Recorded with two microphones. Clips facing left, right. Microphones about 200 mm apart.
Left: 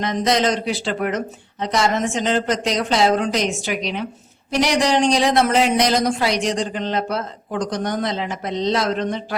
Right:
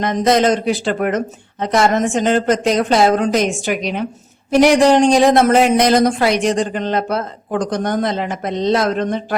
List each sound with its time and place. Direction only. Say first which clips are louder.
0.0 s speech: right 5 dB; 50° right (ahead or behind)